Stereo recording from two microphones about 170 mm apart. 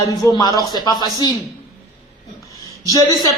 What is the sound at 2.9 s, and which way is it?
Speech, 25° left (ahead or behind).